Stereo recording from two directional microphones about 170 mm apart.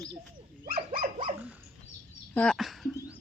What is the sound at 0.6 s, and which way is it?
Dog, 60° right (ahead or behind).